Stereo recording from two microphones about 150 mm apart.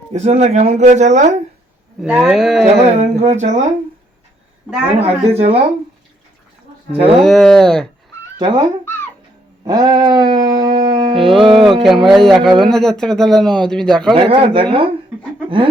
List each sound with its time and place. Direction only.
0.1 s speech: 45° right (ahead or behind)
2.0 s a man's voice: 10° right (ahead or behind)
2.8 s speech: 50° right (ahead or behind)
4.9 s speech: 40° right (ahead or behind)
7.2 s a man's voice: 5° left (ahead or behind)
8.4 s speech: 30° right (ahead or behind)
8.8 s cat: 15° left (ahead or behind)
9.6 s music: 25° right (ahead or behind)
11.6 s a man's voice: centre (ahead or behind)
14.3 s speech: 40° right (ahead or behind)